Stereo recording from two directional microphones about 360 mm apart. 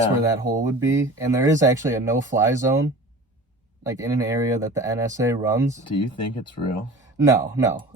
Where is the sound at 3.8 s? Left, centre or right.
Centre.